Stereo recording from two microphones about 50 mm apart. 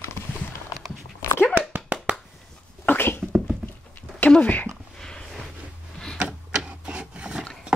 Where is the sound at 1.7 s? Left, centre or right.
Right.